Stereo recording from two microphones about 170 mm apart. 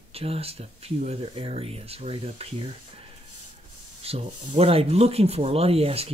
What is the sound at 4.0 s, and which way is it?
Speech, 35° right (ahead or behind).